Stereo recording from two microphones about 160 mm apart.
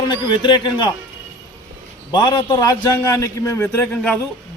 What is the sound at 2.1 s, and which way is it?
A man's voice, 25° left (ahead or behind).